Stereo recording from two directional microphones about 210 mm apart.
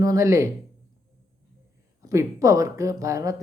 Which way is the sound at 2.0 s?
15° right (ahead or behind).